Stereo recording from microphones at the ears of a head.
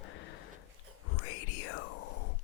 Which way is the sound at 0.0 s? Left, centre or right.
Left.